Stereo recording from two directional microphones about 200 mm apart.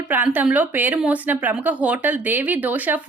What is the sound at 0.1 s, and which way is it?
Speech, 10° right (ahead or behind).